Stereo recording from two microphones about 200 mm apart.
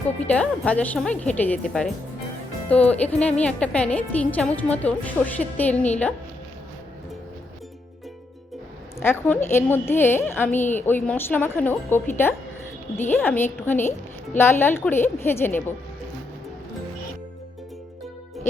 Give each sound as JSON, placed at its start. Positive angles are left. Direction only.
{"t": 0.2, "sound": "a woman's voice", "side_deg": 5}
{"t": 1.1, "sound": "a woman's voice", "side_deg": 35}
{"t": 1.4, "sound": "a woman's voice", "side_deg": 5}
{"t": 9.0, "sound": "a woman's voice", "side_deg": 10}